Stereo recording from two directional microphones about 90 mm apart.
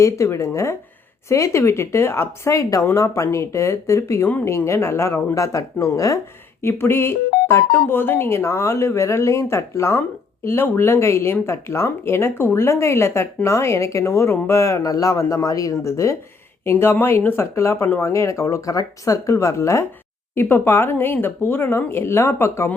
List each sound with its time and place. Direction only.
0.0 s speech: 35° left (ahead or behind)
20.3 s speech: 25° left (ahead or behind)